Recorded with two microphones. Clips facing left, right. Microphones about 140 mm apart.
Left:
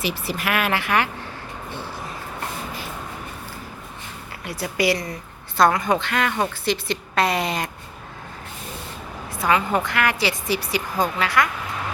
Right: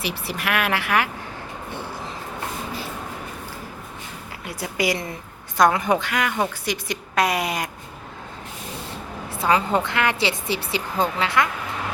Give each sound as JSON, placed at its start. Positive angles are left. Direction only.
{"t": 0.0, "sound": "speech", "side_deg": 0}
{"t": 4.4, "sound": "a woman's voice", "side_deg": -20}
{"t": 5.8, "sound": "speech", "side_deg": -10}
{"t": 9.4, "sound": "a woman's voice", "side_deg": -30}